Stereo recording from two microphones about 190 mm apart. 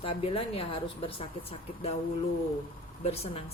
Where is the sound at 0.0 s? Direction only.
30° left (ahead or behind).